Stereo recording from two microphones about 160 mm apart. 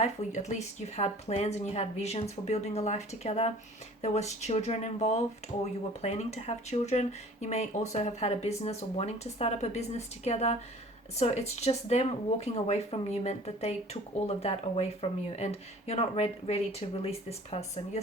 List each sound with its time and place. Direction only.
0.0 s speech: 45° left (ahead or behind)
15.9 s speech: 40° left (ahead or behind)